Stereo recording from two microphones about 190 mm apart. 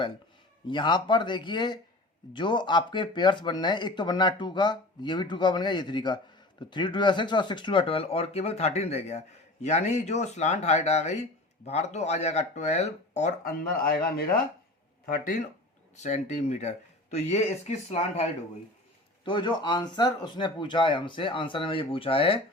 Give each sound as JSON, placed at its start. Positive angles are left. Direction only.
{"t": 0.7, "sound": "speech", "side_deg": 25}